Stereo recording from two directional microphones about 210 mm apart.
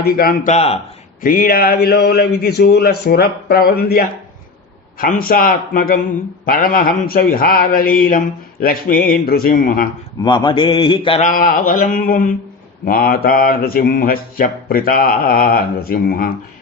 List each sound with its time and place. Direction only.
0.0 s speech: 45° left (ahead or behind)
0.5 s mantra: 30° left (ahead or behind)
1.2 s a man's voice: 45° left (ahead or behind)
10.2 s mantra: 20° left (ahead or behind)
11.3 s a man's voice: 40° left (ahead or behind)